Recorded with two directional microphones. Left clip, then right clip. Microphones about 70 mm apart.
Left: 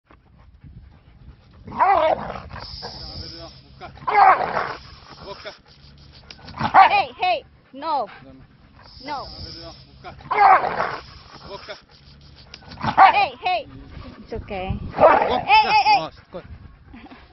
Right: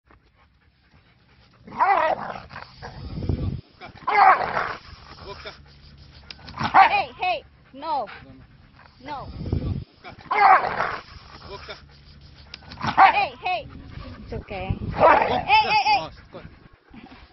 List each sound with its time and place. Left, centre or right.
1.8 s dog: centre
2.2 s dog: centre
4.1 s dog: left
5.2 s a sound: left
6.5 s dog: left
6.9 s a sound: left
7.8 s a sound: left
9.1 s speech: left
10.2 s dog: left
11.4 s speech: left
12.8 s dog: left
13.1 s dog: left
15.0 s speech: right
15.4 s speech: left